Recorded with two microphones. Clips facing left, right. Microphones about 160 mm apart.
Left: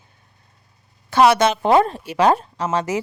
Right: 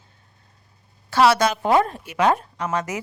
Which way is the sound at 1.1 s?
20° left (ahead or behind).